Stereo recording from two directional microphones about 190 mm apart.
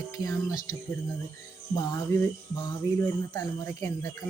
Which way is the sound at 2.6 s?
15° left (ahead or behind).